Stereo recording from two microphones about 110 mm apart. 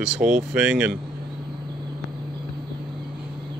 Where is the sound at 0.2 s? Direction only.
10° right (ahead or behind).